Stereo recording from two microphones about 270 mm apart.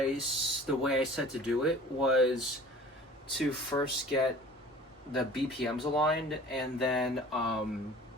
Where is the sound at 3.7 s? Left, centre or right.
Centre.